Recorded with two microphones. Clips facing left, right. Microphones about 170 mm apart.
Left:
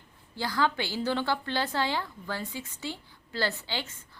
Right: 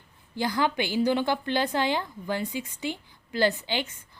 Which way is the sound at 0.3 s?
20° right (ahead or behind).